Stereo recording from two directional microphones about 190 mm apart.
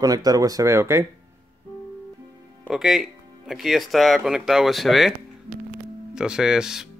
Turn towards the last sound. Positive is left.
turn(degrees=-5)  # may be behind; listen again after turning